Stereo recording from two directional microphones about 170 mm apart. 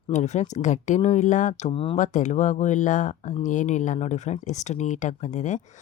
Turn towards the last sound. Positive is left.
turn(degrees=45)  # may be behind; listen again after turning